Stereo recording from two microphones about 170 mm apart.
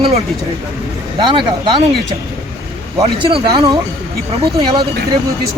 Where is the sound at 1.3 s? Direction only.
30° right (ahead or behind).